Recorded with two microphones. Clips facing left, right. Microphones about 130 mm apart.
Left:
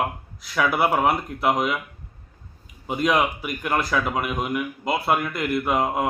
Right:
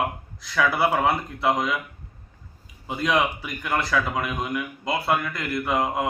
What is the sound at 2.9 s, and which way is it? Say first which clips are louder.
A man's voice: left 2 dB; 20° left (ahead or behind).